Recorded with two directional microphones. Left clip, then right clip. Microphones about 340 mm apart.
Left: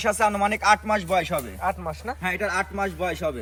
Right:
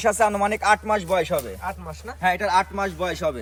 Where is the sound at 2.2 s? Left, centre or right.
Right.